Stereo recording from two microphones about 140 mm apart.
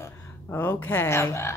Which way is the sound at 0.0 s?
15° left (ahead or behind).